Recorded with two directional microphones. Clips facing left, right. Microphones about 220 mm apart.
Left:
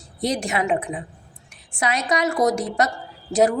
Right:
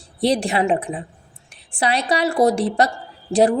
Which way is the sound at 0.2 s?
30° right (ahead or behind).